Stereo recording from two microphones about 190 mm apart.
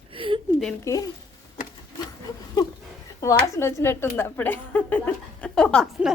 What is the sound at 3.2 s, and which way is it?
A woman's voice, 15° left (ahead or behind).